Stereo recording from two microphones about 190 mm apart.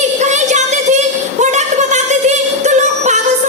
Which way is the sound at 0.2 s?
40° right (ahead or behind).